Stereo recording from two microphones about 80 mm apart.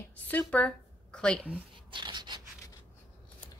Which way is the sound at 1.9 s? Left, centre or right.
Right.